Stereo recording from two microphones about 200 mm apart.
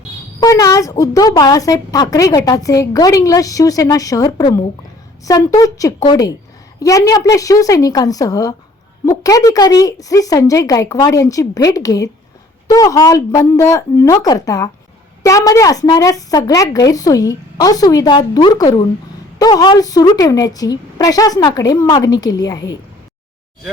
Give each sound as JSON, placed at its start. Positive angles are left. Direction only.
{"t": 0.3, "sound": "a woman's voice", "side_deg": 15}